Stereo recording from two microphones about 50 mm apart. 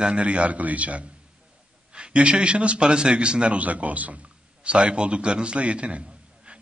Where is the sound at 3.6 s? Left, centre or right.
Right.